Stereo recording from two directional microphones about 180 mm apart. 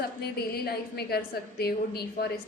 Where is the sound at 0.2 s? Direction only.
60° left (ahead or behind).